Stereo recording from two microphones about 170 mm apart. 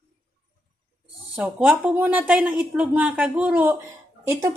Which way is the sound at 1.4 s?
10° right (ahead or behind).